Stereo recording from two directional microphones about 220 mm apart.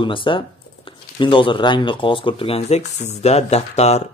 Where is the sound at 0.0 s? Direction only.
25° left (ahead or behind).